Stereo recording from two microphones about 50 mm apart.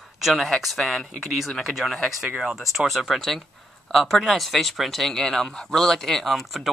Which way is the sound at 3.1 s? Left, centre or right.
Centre.